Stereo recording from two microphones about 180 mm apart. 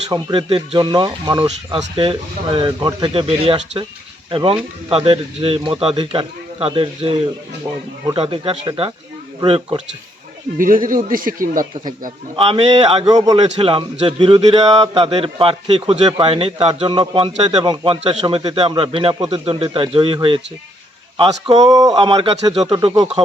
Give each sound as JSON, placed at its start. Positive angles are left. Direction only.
{"t": 0.1, "sound": "a man's voice", "side_deg": -30}
{"t": 10.6, "sound": "speech", "side_deg": -50}
{"t": 12.4, "sound": "speech", "side_deg": -30}
{"t": 13.1, "sound": "a man's voice", "side_deg": -20}